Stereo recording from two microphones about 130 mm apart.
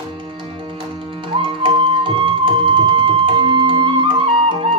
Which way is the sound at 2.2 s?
40° right (ahead or behind).